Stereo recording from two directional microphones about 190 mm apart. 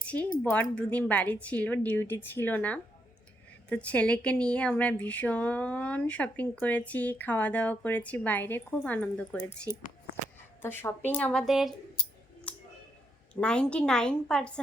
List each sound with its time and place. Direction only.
0.4 s speech: 10° left (ahead or behind)
10.6 s speech: 10° left (ahead or behind)
12.5 s a sound: 5° left (ahead or behind)
13.4 s a woman's voice: 5° left (ahead or behind)